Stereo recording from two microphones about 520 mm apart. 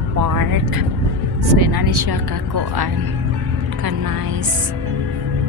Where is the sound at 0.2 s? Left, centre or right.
Right.